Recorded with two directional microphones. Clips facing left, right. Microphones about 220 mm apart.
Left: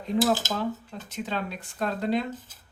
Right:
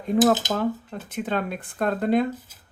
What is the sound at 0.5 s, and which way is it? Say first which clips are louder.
Speech: right 5 dB; 55° right (ahead or behind).